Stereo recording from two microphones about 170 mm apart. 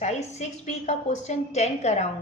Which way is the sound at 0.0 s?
40° left (ahead or behind).